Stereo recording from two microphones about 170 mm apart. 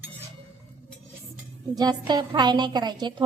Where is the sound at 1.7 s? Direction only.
25° right (ahead or behind).